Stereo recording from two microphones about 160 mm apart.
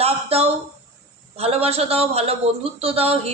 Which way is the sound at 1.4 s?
40° right (ahead or behind).